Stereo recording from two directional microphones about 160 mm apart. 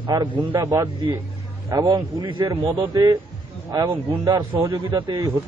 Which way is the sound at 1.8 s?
30° right (ahead or behind).